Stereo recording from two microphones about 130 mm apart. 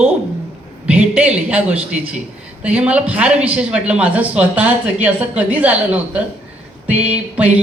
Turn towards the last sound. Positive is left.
turn(degrees=-10)  # may be behind; listen again after turning